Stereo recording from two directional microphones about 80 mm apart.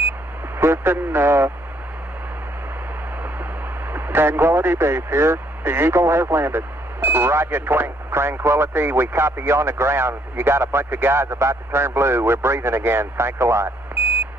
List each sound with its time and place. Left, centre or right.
0.6 s speech: right
3.9 s speech: right